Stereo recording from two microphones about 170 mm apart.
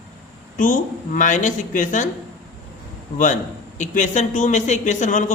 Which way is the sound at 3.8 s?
45° left (ahead or behind).